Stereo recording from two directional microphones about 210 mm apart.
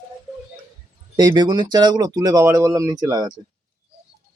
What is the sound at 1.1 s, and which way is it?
Speech, 20° right (ahead or behind).